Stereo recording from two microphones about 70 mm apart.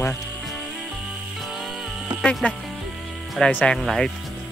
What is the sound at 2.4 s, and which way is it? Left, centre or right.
Speech, left.